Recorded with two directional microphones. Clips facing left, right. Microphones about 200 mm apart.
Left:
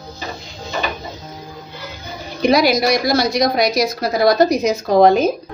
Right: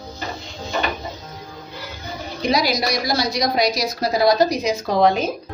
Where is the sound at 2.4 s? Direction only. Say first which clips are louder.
Left 6 dB; 55° left (ahead or behind).